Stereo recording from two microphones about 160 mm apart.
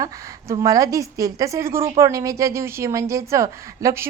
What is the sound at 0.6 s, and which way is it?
A woman's voice, 20° right (ahead or behind).